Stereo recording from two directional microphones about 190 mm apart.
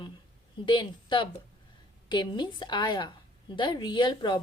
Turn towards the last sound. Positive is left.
turn(degrees=25)  # may be behind; listen again after turning